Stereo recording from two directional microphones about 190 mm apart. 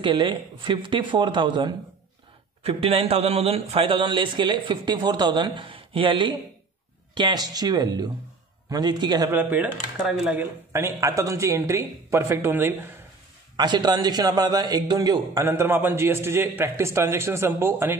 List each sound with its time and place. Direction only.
0.0 s a man's voice: 25° right (ahead or behind)
9.3 s a man's voice: 10° right (ahead or behind)
10.7 s a man's voice: 15° right (ahead or behind)
13.6 s a man's voice: 20° right (ahead or behind)